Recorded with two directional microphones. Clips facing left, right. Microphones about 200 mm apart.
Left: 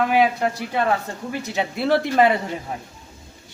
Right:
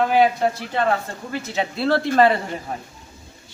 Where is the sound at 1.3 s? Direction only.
15° left (ahead or behind).